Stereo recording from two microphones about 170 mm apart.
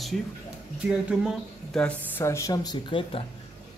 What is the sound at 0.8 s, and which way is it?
Speech, centre (ahead or behind).